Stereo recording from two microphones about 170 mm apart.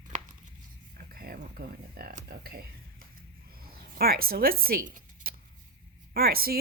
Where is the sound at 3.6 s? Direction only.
60° right (ahead or behind).